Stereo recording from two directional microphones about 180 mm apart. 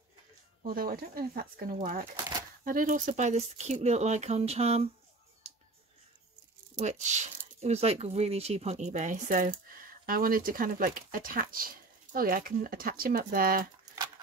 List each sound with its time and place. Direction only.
0.7 s speech: 55° right (ahead or behind); by 4.8 s 35° right (ahead or behind)
5.4 s music: 35° right (ahead or behind)
6.8 s speech: 40° right (ahead or behind)